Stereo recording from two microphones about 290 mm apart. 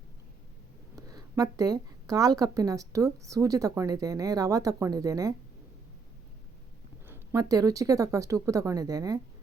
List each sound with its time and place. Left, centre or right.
0.9 s a woman's voice: centre
7.1 s a woman's voice: centre